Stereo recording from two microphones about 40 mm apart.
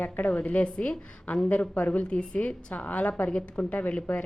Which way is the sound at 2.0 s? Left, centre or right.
Left.